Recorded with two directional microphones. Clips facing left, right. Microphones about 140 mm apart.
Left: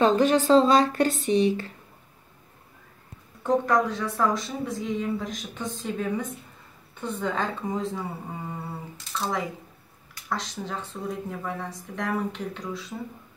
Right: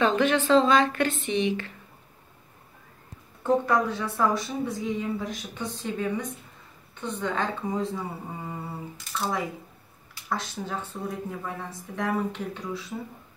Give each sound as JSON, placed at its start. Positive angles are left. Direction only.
{"t": 0.0, "sound": "speech", "side_deg": 40}
{"t": 3.4, "sound": "speech", "side_deg": -5}
{"t": 9.1, "sound": "speech", "side_deg": -5}
{"t": 10.4, "sound": "speech", "side_deg": -5}